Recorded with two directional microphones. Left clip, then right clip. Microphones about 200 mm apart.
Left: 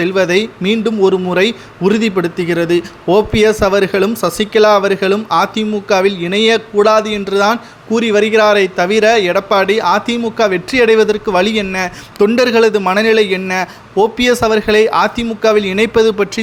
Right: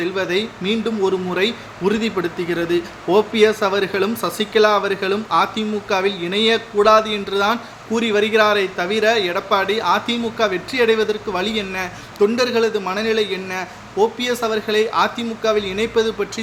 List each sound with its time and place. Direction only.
0.0 s a man's voice: 40° left (ahead or behind)